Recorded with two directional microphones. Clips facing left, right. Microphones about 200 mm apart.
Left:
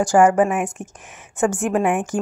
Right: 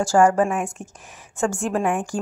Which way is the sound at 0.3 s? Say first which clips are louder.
Left 3 dB; 5° left (ahead or behind).